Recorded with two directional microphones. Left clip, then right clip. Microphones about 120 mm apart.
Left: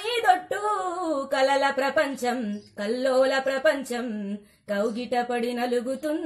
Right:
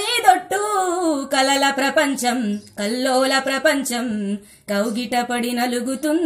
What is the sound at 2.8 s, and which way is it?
Speech, 25° left (ahead or behind).